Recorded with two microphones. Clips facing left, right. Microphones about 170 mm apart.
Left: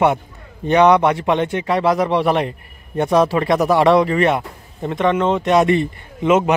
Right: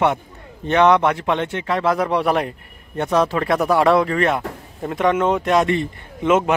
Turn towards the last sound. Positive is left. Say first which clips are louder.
# left 2 dB
turn(degrees=0)  # may be behind; listen again after turning